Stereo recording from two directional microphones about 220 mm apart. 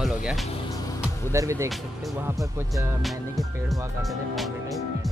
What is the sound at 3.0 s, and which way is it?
Speech, centre (ahead or behind).